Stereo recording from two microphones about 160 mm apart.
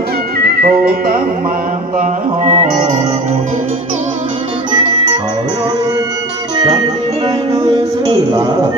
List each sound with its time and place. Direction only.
0.7 s music: 70° right (ahead or behind)
2.0 s music: 50° right (ahead or behind)